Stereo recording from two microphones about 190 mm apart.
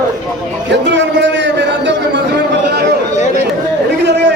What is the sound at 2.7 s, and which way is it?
Chatter, 60° right (ahead or behind).